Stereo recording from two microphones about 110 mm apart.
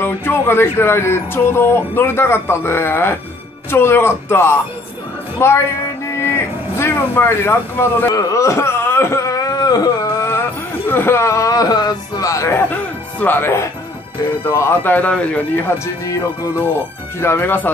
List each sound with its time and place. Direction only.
0.0 s speech: 20° left (ahead or behind)
10.9 s speech: 20° left (ahead or behind)
16.1 s speech: 30° left (ahead or behind)